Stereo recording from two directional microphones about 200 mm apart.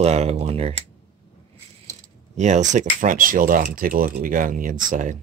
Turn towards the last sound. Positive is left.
turn(degrees=-40)  # may be behind; listen again after turning